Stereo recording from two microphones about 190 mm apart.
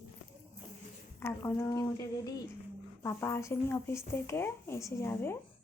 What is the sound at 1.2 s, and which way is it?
A woman's voice, 15° left (ahead or behind).